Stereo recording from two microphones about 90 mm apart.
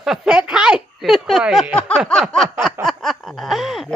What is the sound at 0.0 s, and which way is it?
Speech, 5° right (ahead or behind).